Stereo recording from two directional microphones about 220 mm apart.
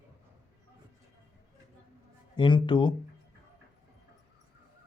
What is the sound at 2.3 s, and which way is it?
Speech, 20° left (ahead or behind).